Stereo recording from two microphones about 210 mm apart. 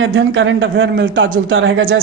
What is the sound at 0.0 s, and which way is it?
Speech, 65° right (ahead or behind).